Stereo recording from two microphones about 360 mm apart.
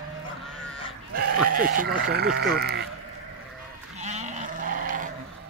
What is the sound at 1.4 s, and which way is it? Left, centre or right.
Sheep, right.